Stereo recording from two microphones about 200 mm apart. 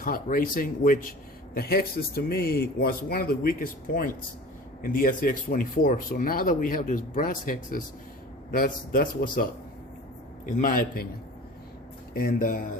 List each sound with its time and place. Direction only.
0.0 s speech: 45° left (ahead or behind)
12.1 s speech: 45° left (ahead or behind)